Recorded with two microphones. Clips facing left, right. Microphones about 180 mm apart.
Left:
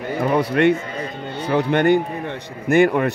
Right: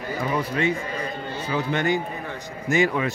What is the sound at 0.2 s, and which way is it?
A man's voice, 65° left (ahead or behind).